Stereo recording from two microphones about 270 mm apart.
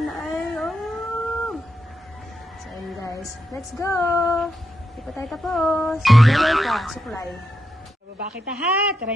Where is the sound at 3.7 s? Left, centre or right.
Centre.